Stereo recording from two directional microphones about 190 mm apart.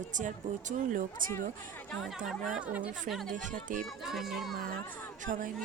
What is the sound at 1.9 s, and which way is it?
A woman's voice, centre (ahead or behind).